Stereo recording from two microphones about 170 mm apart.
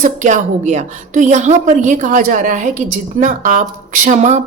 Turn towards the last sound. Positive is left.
turn(degrees=-45)  # may be behind; listen again after turning